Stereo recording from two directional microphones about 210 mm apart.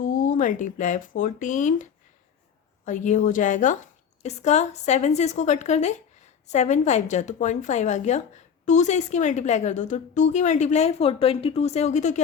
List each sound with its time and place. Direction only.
0.0 s a woman's voice: 40° left (ahead or behind)